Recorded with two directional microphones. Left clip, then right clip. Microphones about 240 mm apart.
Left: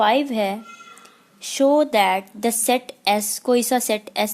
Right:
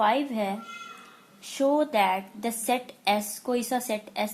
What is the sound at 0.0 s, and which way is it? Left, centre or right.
A woman's voice, left.